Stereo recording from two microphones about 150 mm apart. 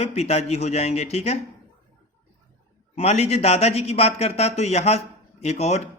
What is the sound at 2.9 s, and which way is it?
Speech, 45° left (ahead or behind).